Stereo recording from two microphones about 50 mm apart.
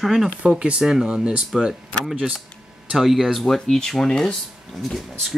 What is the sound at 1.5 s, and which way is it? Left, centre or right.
Speech, centre.